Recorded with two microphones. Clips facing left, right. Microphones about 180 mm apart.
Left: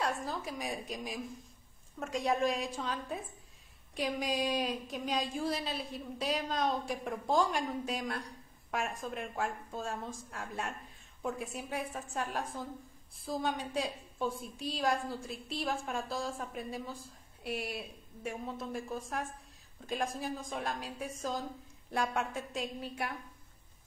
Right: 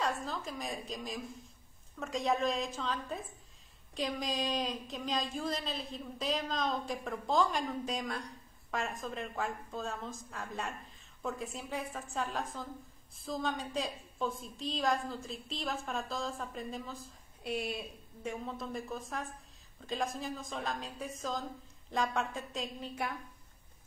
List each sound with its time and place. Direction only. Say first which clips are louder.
0.0 s a woman's voice: even; 10° left (ahead or behind)